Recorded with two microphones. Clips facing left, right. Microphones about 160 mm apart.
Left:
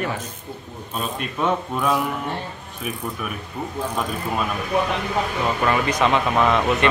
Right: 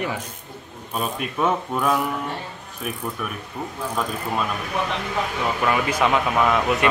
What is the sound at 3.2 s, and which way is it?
Speech, 5° left (ahead or behind).